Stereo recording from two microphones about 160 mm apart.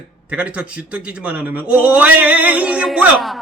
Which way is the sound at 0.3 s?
10° right (ahead or behind).